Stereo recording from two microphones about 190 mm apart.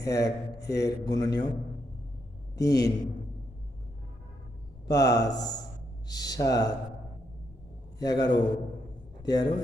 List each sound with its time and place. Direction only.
0.0 s speech: 20° left (ahead or behind)
0.6 s speech: 60° left (ahead or behind)
0.9 s speech: 20° left (ahead or behind)
2.6 s speech: 20° left (ahead or behind)
4.9 s speech: 20° left (ahead or behind)
7.9 s a man's voice: 20° left (ahead or behind)